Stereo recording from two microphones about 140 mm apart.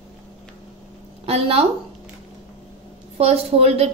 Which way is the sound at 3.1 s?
50° right (ahead or behind).